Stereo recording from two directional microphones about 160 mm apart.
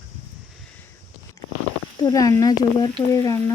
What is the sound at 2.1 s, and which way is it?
Speech, 20° left (ahead or behind).